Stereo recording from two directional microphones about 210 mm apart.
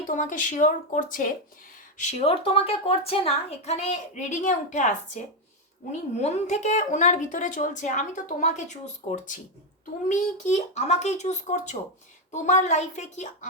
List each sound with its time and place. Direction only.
0.1 s speech: 40° left (ahead or behind)